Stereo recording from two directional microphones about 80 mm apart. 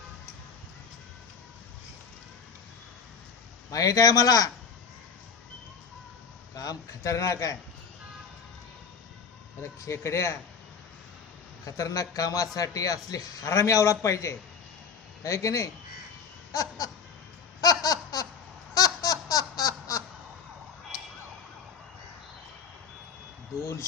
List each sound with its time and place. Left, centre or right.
3.7 s a man's voice: left
6.6 s a man's voice: left
9.8 s speech: left
11.6 s a man's voice: left
16.5 s a sound: left
17.6 s laughter: left
18.7 s a sound: left